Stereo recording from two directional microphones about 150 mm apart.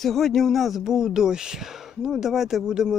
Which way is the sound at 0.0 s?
Centre (ahead or behind).